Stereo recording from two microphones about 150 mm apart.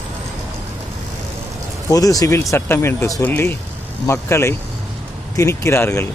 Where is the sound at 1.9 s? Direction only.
25° left (ahead or behind).